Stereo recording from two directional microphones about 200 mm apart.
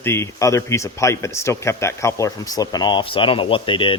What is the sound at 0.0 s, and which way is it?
Speech, 15° left (ahead or behind).